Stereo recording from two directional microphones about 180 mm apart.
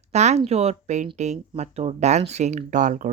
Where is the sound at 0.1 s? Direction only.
40° right (ahead or behind).